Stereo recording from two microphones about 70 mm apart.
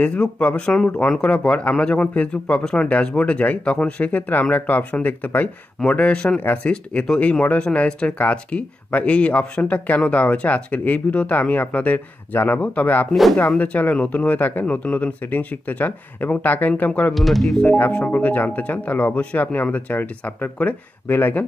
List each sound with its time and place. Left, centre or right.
0.0 s speech: centre
13.1 s speech: centre
13.5 s speech: left
17.1 s speech: centre
17.6 s speech: left